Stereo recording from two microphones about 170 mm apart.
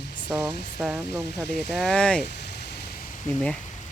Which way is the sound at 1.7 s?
5° left (ahead or behind).